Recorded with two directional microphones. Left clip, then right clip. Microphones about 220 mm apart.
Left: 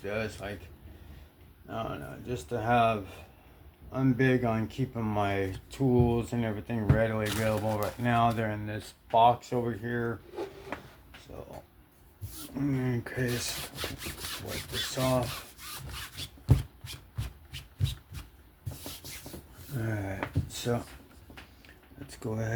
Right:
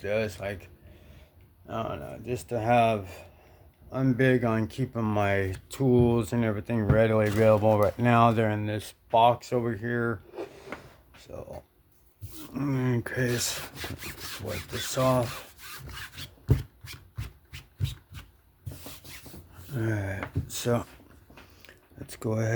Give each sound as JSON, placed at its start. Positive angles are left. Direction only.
{"t": 0.0, "sound": "speech", "side_deg": -45}
{"t": 1.6, "sound": "speech", "side_deg": -45}
{"t": 12.5, "sound": "speech", "side_deg": -50}
{"t": 14.1, "sound": "sawing", "side_deg": -10}
{"t": 14.9, "sound": "speech", "side_deg": -50}
{"t": 19.7, "sound": "speech", "side_deg": -45}
{"t": 22.0, "sound": "speech", "side_deg": -50}